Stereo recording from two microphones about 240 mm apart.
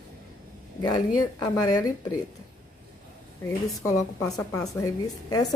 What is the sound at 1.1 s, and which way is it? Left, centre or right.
A woman's voice, centre.